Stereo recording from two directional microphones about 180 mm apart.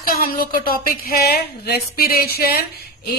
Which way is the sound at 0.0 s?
55° left (ahead or behind).